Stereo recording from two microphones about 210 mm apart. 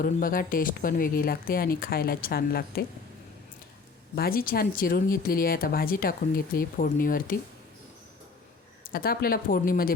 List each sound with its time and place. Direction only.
0.0 s speech: 40° left (ahead or behind)
4.1 s speech: 45° left (ahead or behind)
8.8 s speech: 45° left (ahead or behind)